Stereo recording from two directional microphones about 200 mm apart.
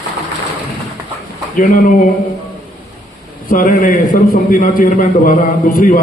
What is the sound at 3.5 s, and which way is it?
A man's voice, 45° left (ahead or behind).